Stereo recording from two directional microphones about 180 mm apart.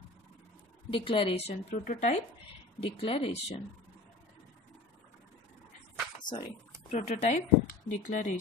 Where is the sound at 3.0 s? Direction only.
30° left (ahead or behind).